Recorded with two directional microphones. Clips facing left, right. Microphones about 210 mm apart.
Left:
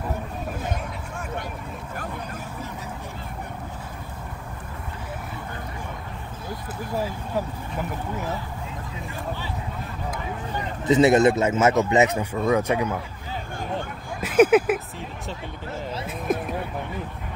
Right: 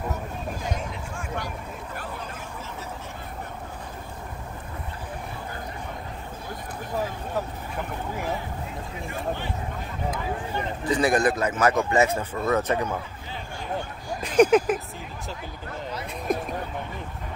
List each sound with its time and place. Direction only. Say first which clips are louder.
10.9 s speech: left 6 dB; 25° left (ahead or behind)
14.2 s speech: left 1 dB; 5° left (ahead or behind)
15.7 s speech: left 2 dB; 25° left (ahead or behind)
16.1 s a sound: left 1 dB; centre (ahead or behind)